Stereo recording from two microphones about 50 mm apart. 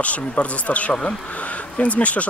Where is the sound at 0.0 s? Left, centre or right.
Left.